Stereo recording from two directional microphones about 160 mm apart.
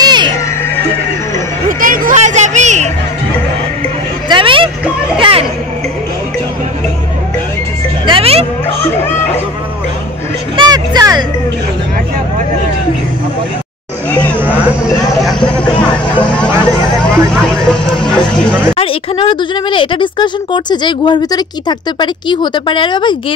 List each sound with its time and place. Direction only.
0.0 s music: 25° right (ahead or behind)
1.7 s a sound: 60° right (ahead or behind)
4.3 s a sound: 30° right (ahead or behind)
8.1 s music: 40° right (ahead or behind)
10.5 s vehicle: 30° right (ahead or behind)
17.0 s vehicle: 5° left (ahead or behind)
18.8 s speech: 35° left (ahead or behind)